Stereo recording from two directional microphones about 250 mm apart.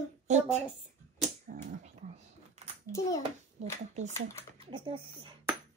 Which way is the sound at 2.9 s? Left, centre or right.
Centre.